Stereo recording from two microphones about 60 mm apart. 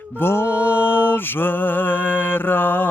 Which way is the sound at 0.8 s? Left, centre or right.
Left.